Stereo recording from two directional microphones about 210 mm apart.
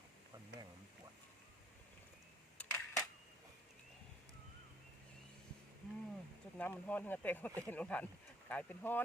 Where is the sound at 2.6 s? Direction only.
5° left (ahead or behind).